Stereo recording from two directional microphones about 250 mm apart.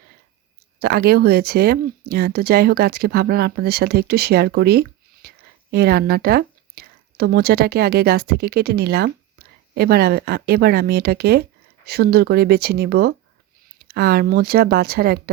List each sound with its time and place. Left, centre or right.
0.8 s speech: right